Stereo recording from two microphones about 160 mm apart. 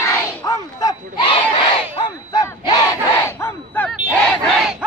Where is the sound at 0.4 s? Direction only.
20° left (ahead or behind).